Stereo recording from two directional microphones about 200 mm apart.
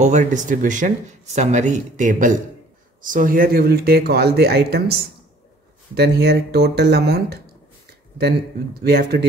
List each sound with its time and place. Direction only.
0.0 s speech: 35° right (ahead or behind); by 7.3 s 55° right (ahead or behind)
8.8 s speech: 50° right (ahead or behind)